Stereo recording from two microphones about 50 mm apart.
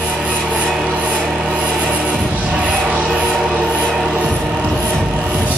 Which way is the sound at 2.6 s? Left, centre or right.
Right.